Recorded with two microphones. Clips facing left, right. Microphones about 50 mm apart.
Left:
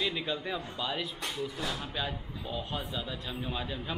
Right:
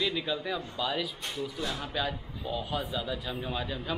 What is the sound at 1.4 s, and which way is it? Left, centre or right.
A man's voice, centre.